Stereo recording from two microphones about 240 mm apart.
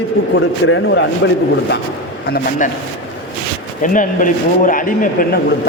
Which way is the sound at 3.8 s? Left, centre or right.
Left.